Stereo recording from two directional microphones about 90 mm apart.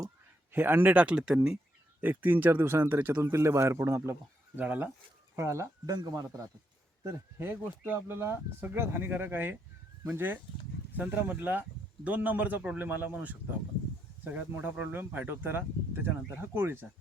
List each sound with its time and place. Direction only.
0.5 s a man's voice: 25° right (ahead or behind)
2.0 s speech: 20° right (ahead or behind)
4.6 s a man's voice: 15° right (ahead or behind)
5.4 s speech: 30° right (ahead or behind)
5.9 s speech: 45° right (ahead or behind)
7.0 s a man's voice: 30° right (ahead or behind)